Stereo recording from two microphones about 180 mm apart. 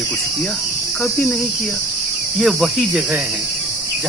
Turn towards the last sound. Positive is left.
turn(degrees=0)  # may be behind; listen again after turning